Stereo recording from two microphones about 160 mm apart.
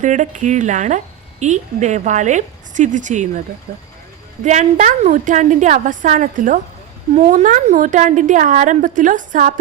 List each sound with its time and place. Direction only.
0.0 s a woman's voice: 50° right (ahead or behind)
3.7 s speech: 65° right (ahead or behind)
4.4 s a woman's voice: 45° right (ahead or behind)